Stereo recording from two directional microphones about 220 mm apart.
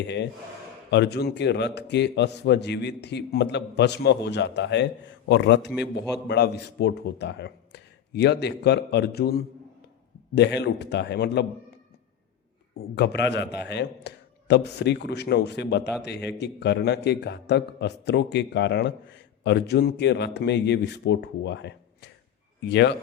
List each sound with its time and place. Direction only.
0.9 s a man's voice: 50° left (ahead or behind)
12.7 s a man's voice: 50° left (ahead or behind)